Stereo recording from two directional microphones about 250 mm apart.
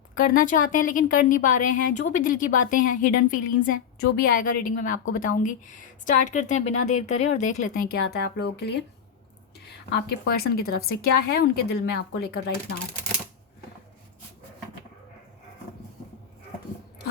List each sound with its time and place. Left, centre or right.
0.1 s a woman's voice: left
9.9 s speech: left